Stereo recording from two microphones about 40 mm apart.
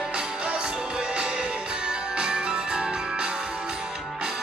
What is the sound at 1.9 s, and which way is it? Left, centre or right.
Music, right.